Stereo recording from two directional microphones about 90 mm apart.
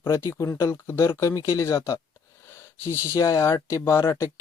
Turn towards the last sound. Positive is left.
turn(degrees=30)  # may be behind; listen again after turning